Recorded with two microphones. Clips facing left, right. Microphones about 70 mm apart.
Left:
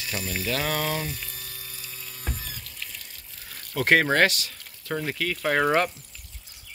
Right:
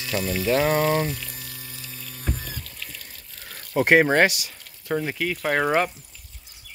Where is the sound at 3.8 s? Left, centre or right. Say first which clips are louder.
Right 3 dB; centre.